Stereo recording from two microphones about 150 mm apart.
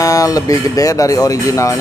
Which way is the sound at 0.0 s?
20° left (ahead or behind).